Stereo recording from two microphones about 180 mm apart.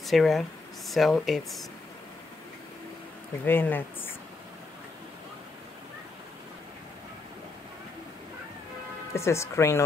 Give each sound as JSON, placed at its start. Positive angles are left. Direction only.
{"t": 0.0, "sound": "speech", "side_deg": 0}
{"t": 3.4, "sound": "speech", "side_deg": 10}
{"t": 9.1, "sound": "speech", "side_deg": 15}